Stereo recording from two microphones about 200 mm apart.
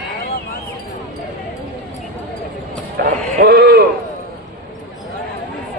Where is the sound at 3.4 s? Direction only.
50° right (ahead or behind).